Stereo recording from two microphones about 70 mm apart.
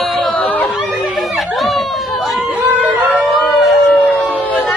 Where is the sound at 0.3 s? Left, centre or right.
Left.